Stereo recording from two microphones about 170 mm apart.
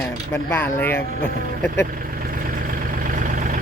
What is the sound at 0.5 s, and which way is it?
Speech, 10° left (ahead or behind).